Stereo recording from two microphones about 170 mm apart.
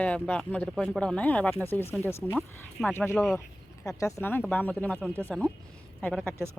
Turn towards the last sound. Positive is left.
turn(degrees=5)  # may be behind; listen again after turning